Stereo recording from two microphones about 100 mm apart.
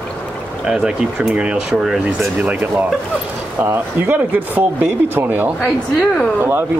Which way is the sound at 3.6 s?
20° right (ahead or behind).